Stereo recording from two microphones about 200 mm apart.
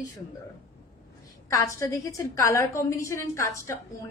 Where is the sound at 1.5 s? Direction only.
15° left (ahead or behind).